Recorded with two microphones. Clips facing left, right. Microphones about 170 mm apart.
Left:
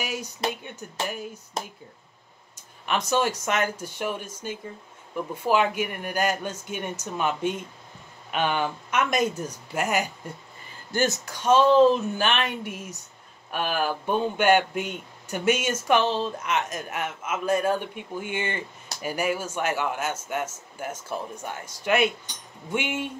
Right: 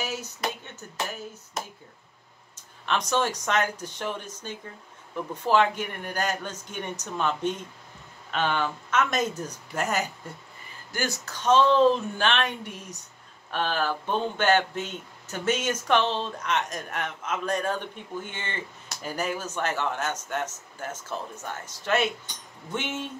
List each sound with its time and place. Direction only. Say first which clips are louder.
0.0 s a man's voice: left 1 dB; 10° left (ahead or behind)
2.5 s a man's voice: left 1 dB; 10° left (ahead or behind)
10.9 s speech: left 6 dB; 25° left (ahead or behind)
11.2 s a man's voice: left 1 dB; 10° left (ahead or behind)